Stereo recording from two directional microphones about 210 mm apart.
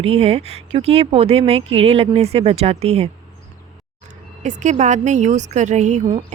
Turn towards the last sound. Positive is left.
turn(degrees=-35)  # may be behind; listen again after turning